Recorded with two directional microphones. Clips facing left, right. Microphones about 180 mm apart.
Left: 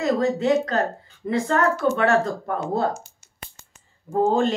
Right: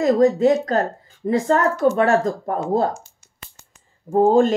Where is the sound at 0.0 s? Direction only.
45° right (ahead or behind).